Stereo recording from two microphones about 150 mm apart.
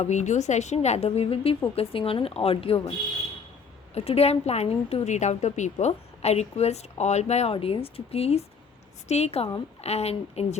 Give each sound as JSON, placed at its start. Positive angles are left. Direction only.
{"t": 0.0, "sound": "a woman's voice", "side_deg": 50}
{"t": 3.9, "sound": "a woman's voice", "side_deg": 45}